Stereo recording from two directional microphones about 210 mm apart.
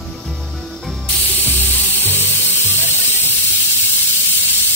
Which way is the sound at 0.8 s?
10° left (ahead or behind).